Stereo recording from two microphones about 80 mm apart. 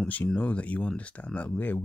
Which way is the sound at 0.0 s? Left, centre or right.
Centre.